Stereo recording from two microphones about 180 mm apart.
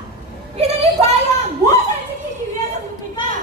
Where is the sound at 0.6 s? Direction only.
35° right (ahead or behind).